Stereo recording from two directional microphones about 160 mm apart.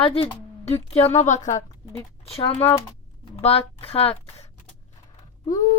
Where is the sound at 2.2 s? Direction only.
40° left (ahead or behind).